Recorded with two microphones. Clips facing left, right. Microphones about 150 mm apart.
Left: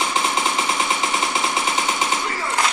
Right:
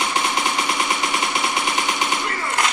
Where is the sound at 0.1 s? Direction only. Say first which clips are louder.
Even; 25° left (ahead or behind).